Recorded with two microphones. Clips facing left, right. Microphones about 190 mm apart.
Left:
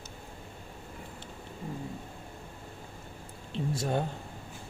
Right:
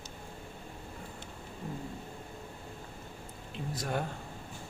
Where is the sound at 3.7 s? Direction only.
25° left (ahead or behind).